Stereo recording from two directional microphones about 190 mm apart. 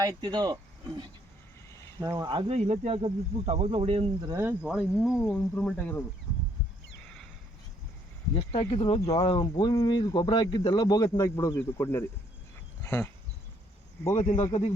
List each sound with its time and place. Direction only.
0.0 s speech: 25° right (ahead or behind)
4.4 s speech: 10° right (ahead or behind); by 6.1 s 5° left (ahead or behind)
8.4 s speech: 25° left (ahead or behind)
12.8 s a sound: 15° left (ahead or behind)
14.3 s speech: 15° left (ahead or behind)